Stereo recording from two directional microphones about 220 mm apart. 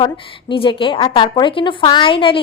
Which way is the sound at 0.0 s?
25° left (ahead or behind).